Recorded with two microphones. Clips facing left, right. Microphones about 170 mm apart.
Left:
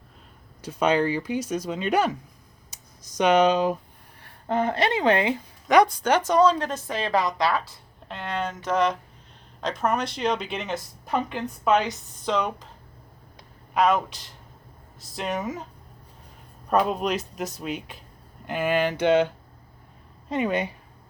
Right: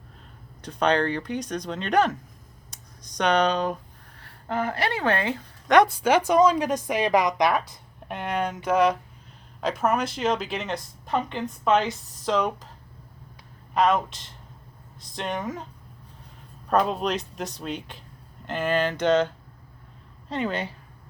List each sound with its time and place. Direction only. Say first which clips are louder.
0.6 s speech: left 1 dB; 5° left (ahead or behind)
2.6 s a sound: right 2 dB; 5° left (ahead or behind)
4.2 s speech: left 3 dB; 20° left (ahead or behind)
5.6 s speech: even; centre (ahead or behind)
13.7 s speech: even; centre (ahead or behind)
16.6 s speech: even; centre (ahead or behind)
20.3 s speech: left 3 dB; 15° left (ahead or behind)